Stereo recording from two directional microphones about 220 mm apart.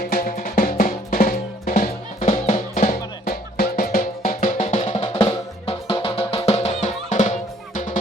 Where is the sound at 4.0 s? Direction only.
35° left (ahead or behind).